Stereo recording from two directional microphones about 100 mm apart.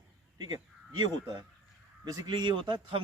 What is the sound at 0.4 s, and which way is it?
A man's voice, 45° right (ahead or behind).